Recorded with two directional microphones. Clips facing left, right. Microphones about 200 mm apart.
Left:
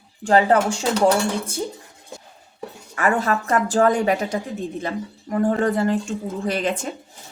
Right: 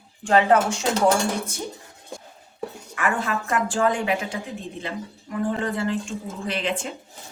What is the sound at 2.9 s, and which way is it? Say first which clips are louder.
Speech: left 5 dB; 40° left (ahead or behind).